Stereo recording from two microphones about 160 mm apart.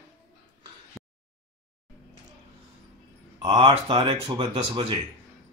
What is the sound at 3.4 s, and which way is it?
A man's voice, 30° right (ahead or behind).